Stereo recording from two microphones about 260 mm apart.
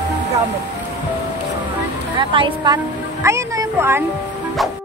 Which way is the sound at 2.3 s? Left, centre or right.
Centre.